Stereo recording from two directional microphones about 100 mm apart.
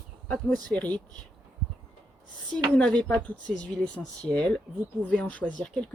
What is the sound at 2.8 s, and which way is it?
Speech, 10° left (ahead or behind).